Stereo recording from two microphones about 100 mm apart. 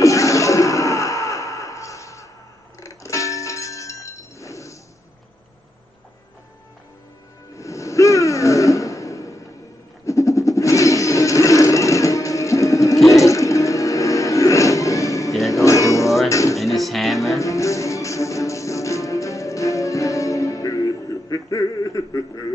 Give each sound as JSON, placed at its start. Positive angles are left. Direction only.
{"t": 0.0, "sound": "a sound", "side_deg": 30}
{"t": 2.8, "sound": "music", "side_deg": 30}
{"t": 7.5, "sound": "a sound", "side_deg": 30}
{"t": 15.5, "sound": "music", "side_deg": 30}
{"t": 16.5, "sound": "music", "side_deg": 0}
{"t": 17.4, "sound": "music", "side_deg": 30}